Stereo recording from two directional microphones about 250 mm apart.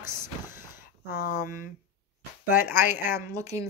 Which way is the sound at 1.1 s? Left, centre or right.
Left.